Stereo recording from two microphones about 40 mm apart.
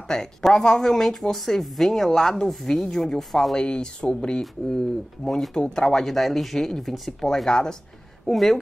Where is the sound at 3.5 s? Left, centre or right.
Left.